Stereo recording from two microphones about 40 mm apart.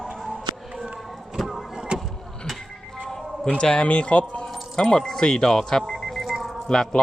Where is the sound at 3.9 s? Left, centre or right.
Left.